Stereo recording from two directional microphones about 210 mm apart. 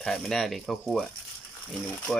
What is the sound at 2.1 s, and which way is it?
Speech, centre (ahead or behind).